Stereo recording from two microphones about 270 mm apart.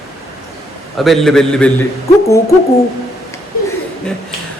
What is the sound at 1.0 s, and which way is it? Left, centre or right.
Speech, centre.